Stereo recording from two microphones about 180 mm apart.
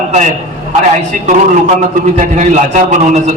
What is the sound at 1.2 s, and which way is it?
A man's voice, 45° right (ahead or behind).